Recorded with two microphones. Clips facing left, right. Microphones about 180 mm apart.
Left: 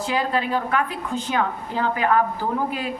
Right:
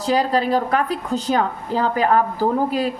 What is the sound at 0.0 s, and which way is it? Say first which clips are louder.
A woman's voice: right 5 dB; 35° right (ahead or behind).